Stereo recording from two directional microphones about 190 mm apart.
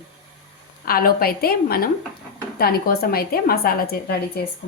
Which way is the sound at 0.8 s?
50° left (ahead or behind).